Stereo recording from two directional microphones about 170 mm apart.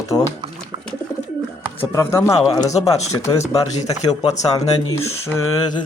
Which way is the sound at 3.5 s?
20° left (ahead or behind).